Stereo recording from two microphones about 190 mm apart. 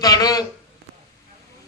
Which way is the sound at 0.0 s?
20° left (ahead or behind).